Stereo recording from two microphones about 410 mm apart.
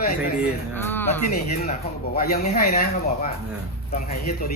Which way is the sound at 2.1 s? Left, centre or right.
Left.